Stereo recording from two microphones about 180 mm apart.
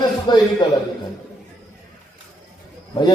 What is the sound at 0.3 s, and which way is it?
Speech, 25° left (ahead or behind).